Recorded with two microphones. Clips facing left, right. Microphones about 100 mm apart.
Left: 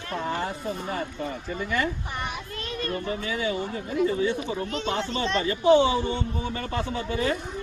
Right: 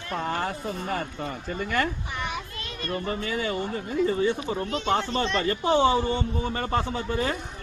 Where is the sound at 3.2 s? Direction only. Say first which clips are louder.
Even; 45° right (ahead or behind).